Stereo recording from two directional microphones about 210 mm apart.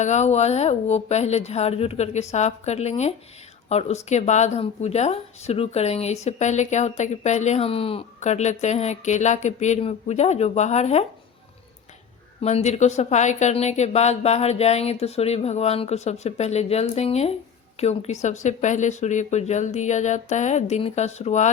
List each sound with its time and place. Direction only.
0.0 s speech: 30° left (ahead or behind)
12.4 s speech: 30° left (ahead or behind)